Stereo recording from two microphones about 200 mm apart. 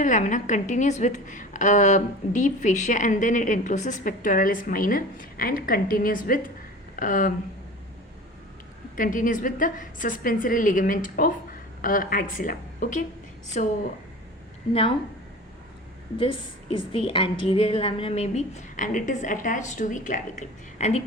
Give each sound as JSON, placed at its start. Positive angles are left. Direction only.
{"t": 0.0, "sound": "a woman's voice", "side_deg": 40}
{"t": 9.0, "sound": "a woman's voice", "side_deg": 40}
{"t": 16.1, "sound": "a woman's voice", "side_deg": 25}